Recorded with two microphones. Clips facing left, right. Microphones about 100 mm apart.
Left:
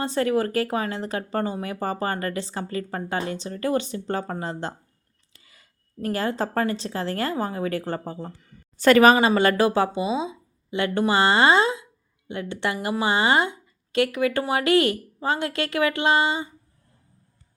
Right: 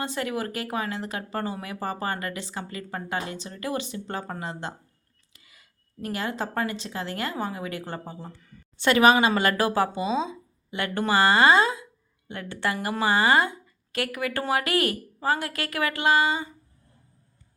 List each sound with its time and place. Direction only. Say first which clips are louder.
0.0 s speech: left 7 dB; 35° left (ahead or behind)
9.3 s a woman's voice: left 4 dB; 25° left (ahead or behind)